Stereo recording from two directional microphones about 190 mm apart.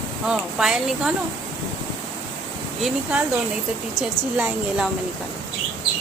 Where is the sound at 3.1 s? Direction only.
5° right (ahead or behind).